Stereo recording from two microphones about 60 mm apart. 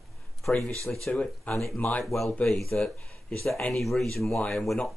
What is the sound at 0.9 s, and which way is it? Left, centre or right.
Speech, left.